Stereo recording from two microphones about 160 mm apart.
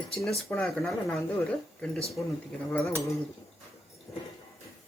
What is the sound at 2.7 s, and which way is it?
Cutlery, 15° left (ahead or behind).